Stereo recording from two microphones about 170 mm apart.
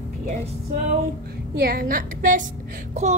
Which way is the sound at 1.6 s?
60° right (ahead or behind).